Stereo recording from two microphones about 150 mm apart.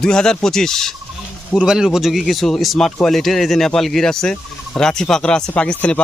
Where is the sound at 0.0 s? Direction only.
5° left (ahead or behind).